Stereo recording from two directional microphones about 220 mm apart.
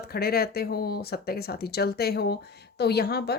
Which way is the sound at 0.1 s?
45° left (ahead or behind).